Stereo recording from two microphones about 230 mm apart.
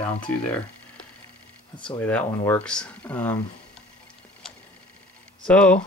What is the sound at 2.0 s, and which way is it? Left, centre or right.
Speech, centre.